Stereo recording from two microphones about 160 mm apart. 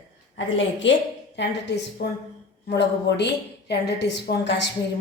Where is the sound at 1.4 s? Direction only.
90° left.